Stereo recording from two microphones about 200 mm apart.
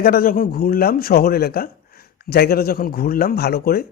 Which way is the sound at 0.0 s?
45° left (ahead or behind).